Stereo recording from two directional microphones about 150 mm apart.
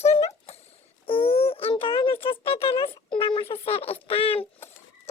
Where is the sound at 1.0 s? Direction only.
40° left (ahead or behind).